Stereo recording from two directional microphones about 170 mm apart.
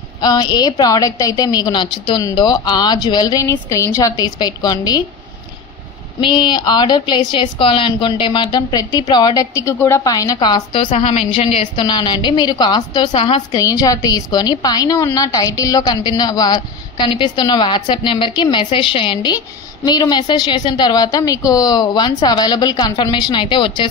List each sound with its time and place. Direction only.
0.2 s a woman's voice: 25° left (ahead or behind)
6.2 s a woman's voice: 25° left (ahead or behind)
10.9 s a woman's voice: 40° left (ahead or behind)